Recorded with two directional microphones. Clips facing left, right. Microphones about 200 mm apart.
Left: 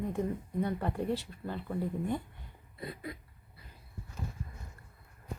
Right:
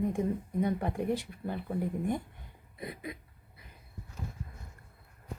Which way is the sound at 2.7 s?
20° right (ahead or behind).